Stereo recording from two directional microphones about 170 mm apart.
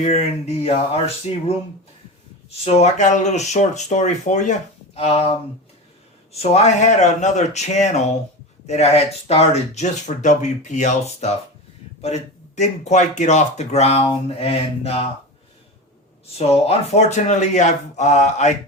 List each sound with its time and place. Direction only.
0.0 s speech: 40° left (ahead or behind)
2.6 s speech: 40° left (ahead or behind)
6.4 s speech: 40° left (ahead or behind)
16.2 s speech: 35° left (ahead or behind)